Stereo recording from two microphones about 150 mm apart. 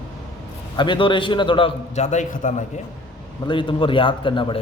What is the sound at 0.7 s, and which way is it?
Speech, 30° left (ahead or behind).